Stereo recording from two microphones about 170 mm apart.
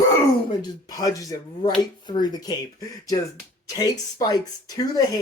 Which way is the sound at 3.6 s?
20° left (ahead or behind).